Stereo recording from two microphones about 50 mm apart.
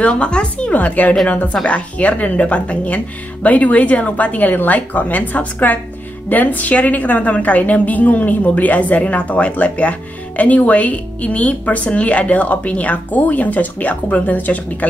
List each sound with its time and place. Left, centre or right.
0.0 s a woman's voice: left
1.5 s a woman's voice: left